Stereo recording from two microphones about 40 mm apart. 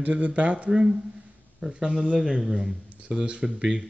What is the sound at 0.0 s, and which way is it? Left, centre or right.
Speech, right.